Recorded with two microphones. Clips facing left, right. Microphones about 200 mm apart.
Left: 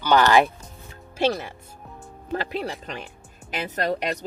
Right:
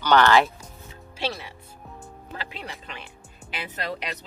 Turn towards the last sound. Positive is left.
turn(degrees=45)  # may be behind; listen again after turning